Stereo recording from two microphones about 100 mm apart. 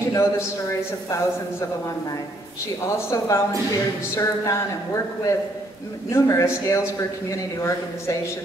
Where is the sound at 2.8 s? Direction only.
30° left (ahead or behind).